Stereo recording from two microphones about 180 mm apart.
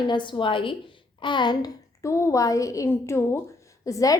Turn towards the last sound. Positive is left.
turn(degrees=20)  # may be behind; listen again after turning